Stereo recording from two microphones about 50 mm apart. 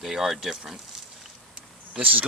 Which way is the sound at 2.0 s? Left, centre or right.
Right.